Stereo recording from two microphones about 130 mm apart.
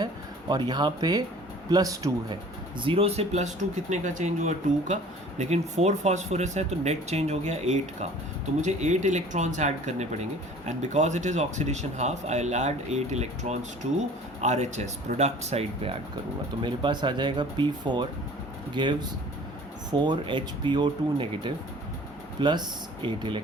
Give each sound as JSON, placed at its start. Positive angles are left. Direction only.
{"t": 0.0, "sound": "speech", "side_deg": -30}
{"t": 2.8, "sound": "speech", "side_deg": -45}
{"t": 16.6, "sound": "speech", "side_deg": -35}